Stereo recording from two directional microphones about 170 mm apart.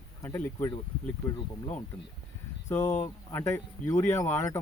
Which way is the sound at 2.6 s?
15° left (ahead or behind).